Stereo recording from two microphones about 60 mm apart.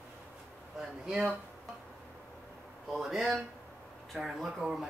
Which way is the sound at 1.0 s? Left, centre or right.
Centre.